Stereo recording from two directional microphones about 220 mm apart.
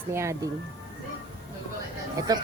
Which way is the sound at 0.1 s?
10° right (ahead or behind).